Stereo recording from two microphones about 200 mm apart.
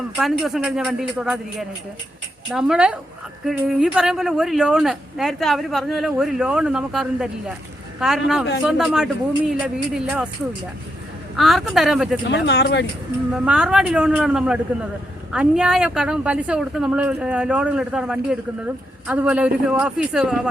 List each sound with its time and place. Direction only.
0.2 s speech: centre (ahead or behind)
11.3 s speech: centre (ahead or behind)
12.3 s speech: 60° left (ahead or behind)
13.3 s speech: 5° right (ahead or behind)